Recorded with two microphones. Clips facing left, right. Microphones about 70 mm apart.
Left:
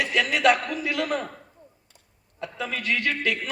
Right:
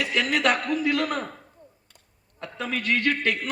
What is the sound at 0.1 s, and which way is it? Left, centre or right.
A man's voice, right.